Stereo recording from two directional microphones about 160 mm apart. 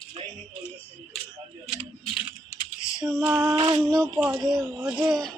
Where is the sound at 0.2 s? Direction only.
35° right (ahead or behind).